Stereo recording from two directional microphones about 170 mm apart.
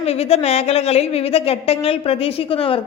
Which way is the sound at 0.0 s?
35° left (ahead or behind).